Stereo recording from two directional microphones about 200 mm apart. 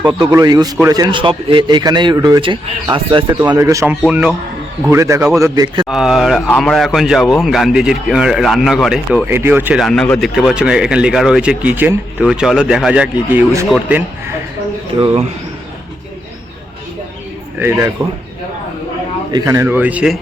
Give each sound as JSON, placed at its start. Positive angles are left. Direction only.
{"t": 0.2, "sound": "a man's voice", "side_deg": -20}
{"t": 4.9, "sound": "a man's voice", "side_deg": -15}
{"t": 5.9, "sound": "speech", "side_deg": 0}
{"t": 9.8, "sound": "speech", "side_deg": 0}
{"t": 17.6, "sound": "a man's voice", "side_deg": -15}
{"t": 19.3, "sound": "a man's voice", "side_deg": -15}